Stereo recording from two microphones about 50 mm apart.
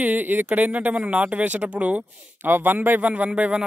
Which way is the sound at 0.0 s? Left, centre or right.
Right.